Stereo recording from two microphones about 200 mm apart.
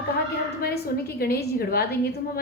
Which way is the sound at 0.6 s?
50° left (ahead or behind).